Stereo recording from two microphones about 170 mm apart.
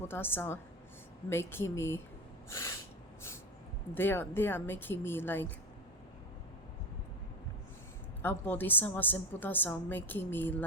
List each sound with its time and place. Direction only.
0.1 s a woman's voice: 15° left (ahead or behind)
3.9 s a woman's voice: 15° left (ahead or behind)
8.2 s a woman's voice: 10° left (ahead or behind)